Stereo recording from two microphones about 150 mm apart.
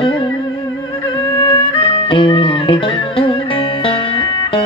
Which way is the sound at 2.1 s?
35° left (ahead or behind).